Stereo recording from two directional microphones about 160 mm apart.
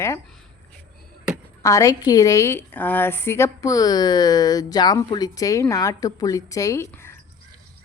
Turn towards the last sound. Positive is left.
turn(degrees=15)  # may be behind; listen again after turning